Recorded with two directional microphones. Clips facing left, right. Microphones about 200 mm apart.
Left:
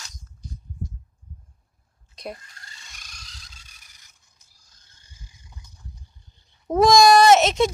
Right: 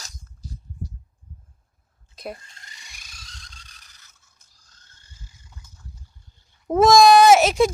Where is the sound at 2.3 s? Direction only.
25° right (ahead or behind); by 5.8 s 15° left (ahead or behind).